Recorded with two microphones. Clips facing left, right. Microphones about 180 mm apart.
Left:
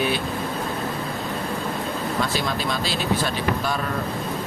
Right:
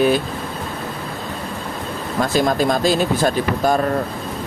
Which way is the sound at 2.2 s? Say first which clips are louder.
Right 11 dB; 45° right (ahead or behind).